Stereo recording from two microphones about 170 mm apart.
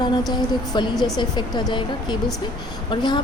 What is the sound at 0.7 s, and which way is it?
A woman's voice, 25° left (ahead or behind).